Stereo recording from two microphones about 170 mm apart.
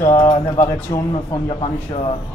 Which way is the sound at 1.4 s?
35° left (ahead or behind).